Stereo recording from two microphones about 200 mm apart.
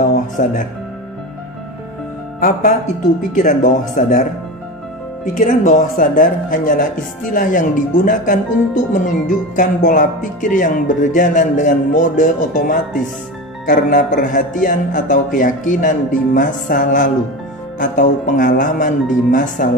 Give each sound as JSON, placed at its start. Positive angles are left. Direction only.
{"t": 0.0, "sound": "music", "side_deg": 40}
{"t": 2.4, "sound": "speech", "side_deg": 40}
{"t": 5.2, "sound": "speech", "side_deg": 40}
{"t": 9.6, "sound": "speech", "side_deg": 40}